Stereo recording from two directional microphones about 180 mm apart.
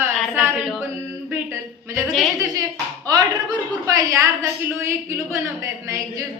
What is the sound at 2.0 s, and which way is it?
Speech, centre (ahead or behind).